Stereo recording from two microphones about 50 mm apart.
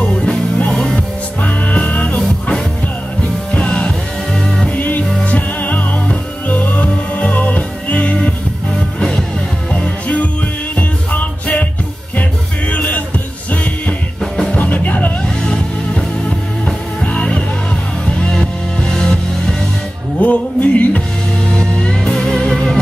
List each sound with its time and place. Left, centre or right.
0.0 s music: centre
1.4 s music: left
3.5 s music: left
9.7 s music: left
14.2 s music: centre
14.5 s music: left
15.4 s music: centre
18.3 s music: centre
20.2 s music: left
21.5 s music: centre